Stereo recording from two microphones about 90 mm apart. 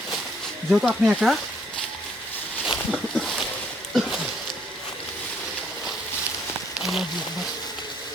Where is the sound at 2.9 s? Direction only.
Centre (ahead or behind).